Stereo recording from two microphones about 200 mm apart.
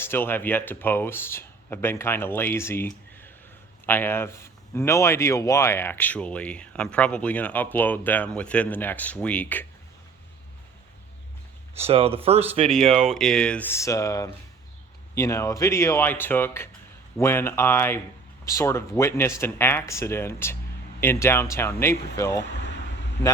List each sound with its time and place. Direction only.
0.0 s speech: 10° left (ahead or behind)
11.7 s speech: 30° right (ahead or behind)
12.9 s speech: centre (ahead or behind); by 22.4 s 15° left (ahead or behind)